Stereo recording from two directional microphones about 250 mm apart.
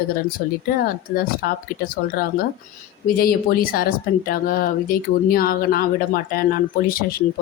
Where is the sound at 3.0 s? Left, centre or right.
Left.